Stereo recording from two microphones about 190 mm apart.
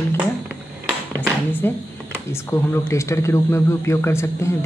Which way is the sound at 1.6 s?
10° left (ahead or behind).